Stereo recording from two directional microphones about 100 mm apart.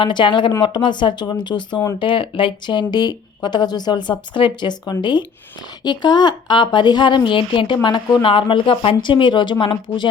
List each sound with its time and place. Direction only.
0.0 s a woman's voice: 55° left (ahead or behind)